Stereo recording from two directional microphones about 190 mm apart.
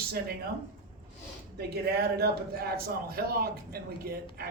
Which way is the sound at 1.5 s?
55° right (ahead or behind).